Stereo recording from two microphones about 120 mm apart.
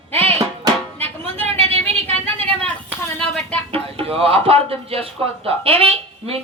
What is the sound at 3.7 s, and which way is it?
A woman's voice, 50° right (ahead or behind).